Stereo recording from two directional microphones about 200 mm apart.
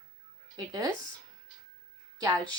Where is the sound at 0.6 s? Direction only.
20° right (ahead or behind).